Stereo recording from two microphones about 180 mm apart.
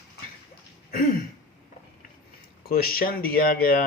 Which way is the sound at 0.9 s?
50° left (ahead or behind).